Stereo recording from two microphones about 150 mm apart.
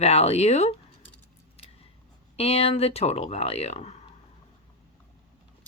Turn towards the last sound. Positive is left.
turn(degrees=45)  # may be behind; listen again after turning